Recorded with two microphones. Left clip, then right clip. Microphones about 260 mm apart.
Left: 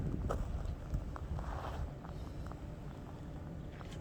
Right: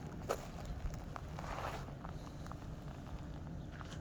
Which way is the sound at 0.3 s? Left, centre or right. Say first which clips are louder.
Right 2 dB; right.